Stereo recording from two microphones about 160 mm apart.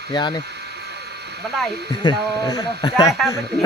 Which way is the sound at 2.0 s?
25° left (ahead or behind).